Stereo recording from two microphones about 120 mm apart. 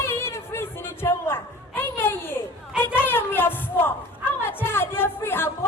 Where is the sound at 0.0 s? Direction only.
20° left (ahead or behind).